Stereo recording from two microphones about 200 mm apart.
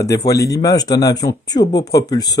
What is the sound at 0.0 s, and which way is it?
Speech, 15° left (ahead or behind).